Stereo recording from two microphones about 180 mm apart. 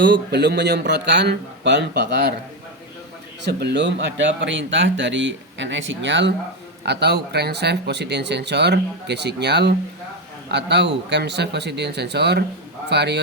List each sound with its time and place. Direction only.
0.0 s speech: 70° right (ahead or behind)
3.4 s speech: 70° right (ahead or behind)
4.4 s speech: 90° right
6.8 s speech: 70° right (ahead or behind)